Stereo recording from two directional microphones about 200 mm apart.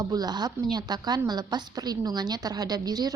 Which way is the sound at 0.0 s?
20° right (ahead or behind).